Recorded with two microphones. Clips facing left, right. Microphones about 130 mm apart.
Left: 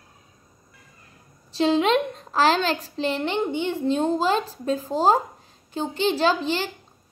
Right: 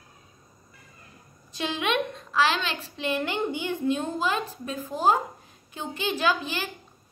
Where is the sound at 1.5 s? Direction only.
30° left (ahead or behind).